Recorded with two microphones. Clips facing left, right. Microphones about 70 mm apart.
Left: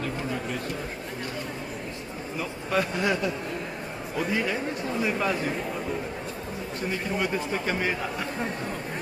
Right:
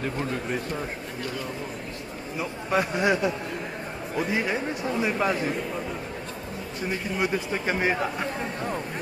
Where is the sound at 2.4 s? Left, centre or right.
Centre.